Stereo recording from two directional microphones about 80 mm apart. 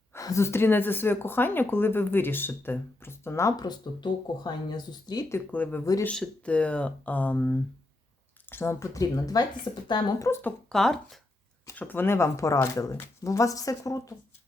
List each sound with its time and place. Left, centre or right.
0.1 s speech: left
3.6 s speech: left
5.5 s speech: centre
8.4 s speech: left
10.3 s speech: left
10.7 s speech: centre
11.7 s speech: left